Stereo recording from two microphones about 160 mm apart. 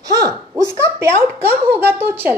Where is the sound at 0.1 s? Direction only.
20° right (ahead or behind).